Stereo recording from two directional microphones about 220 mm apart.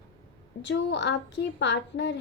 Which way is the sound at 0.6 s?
55° left (ahead or behind).